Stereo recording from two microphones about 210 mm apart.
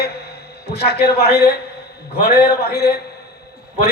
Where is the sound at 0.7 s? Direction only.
50° left (ahead or behind).